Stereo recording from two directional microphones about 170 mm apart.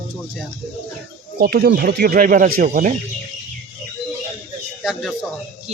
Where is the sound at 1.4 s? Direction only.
65° right (ahead or behind).